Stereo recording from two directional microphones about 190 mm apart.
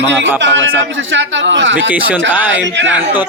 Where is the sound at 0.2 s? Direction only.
70° right (ahead or behind).